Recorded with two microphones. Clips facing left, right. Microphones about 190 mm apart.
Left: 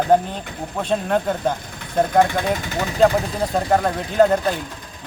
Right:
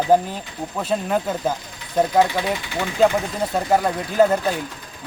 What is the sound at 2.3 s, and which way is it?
Speech, 50° left (ahead or behind).